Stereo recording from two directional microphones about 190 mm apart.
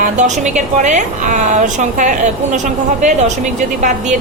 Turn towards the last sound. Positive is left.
turn(degrees=-40)  # may be behind; listen again after turning